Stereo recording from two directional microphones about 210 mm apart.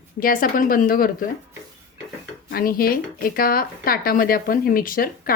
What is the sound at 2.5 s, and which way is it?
Speech, 45° left (ahead or behind).